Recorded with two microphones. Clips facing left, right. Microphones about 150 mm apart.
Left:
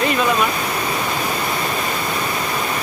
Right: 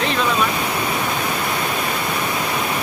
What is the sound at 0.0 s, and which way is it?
Waterfall, 5° left (ahead or behind).